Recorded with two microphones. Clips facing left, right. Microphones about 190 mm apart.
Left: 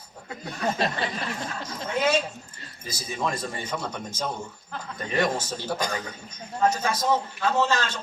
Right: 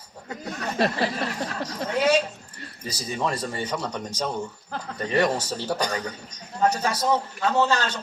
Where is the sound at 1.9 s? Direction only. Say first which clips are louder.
Right 2 dB; 35° right (ahead or behind).